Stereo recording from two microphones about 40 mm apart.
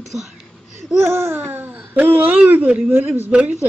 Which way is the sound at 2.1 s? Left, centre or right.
Right.